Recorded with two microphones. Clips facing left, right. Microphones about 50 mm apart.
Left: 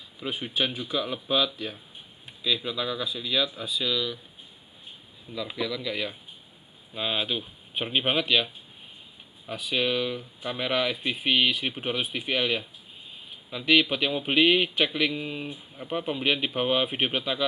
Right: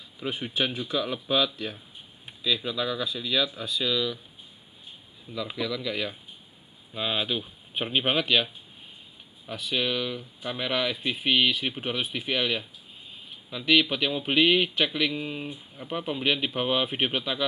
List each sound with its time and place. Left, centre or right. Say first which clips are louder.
0.2 s speech: even; centre
5.3 s speech: even; centre
9.5 s speech: left 1 dB; centre